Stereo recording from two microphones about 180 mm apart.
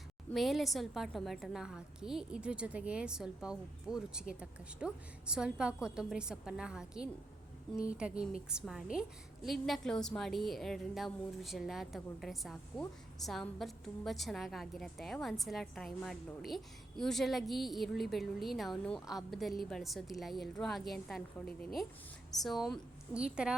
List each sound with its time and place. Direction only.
0.3 s a woman's voice: centre (ahead or behind)